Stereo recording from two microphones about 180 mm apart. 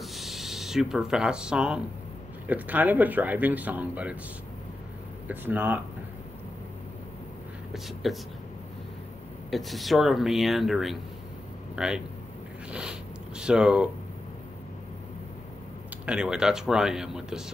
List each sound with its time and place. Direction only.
0.0 s a sound: centre (ahead or behind)
2.4 s speech: 10° right (ahead or behind)
5.3 s speech: 10° right (ahead or behind)
7.7 s speech: centre (ahead or behind)
9.5 s speech: centre (ahead or behind)
13.4 s speech: 5° right (ahead or behind)
16.1 s speech: 5° right (ahead or behind)